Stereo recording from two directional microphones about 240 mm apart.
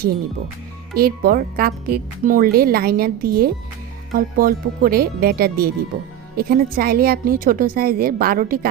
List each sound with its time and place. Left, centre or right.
0.9 s speech: right